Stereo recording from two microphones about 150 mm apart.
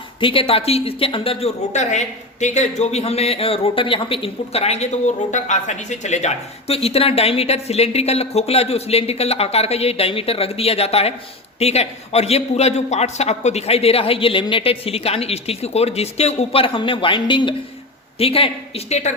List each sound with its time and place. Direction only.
0.2 s a man's voice: 35° left (ahead or behind)